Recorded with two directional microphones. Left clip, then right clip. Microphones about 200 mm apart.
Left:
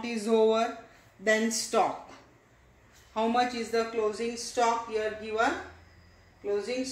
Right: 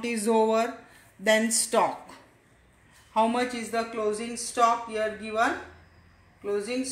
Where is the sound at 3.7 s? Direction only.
55° right (ahead or behind).